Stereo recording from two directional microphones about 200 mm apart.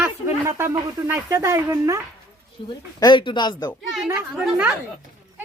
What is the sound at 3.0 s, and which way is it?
Speech, 25° left (ahead or behind).